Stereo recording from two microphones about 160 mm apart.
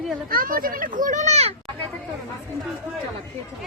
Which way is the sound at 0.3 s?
60° right (ahead or behind).